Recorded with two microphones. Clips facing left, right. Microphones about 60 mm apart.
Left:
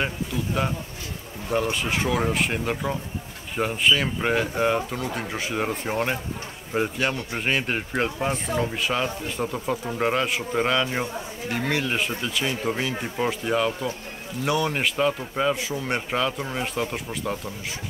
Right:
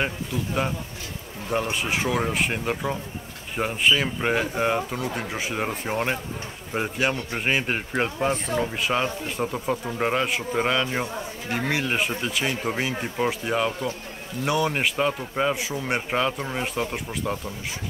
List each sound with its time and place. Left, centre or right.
1.5 s a man's voice: centre
13.2 s a man's voice: centre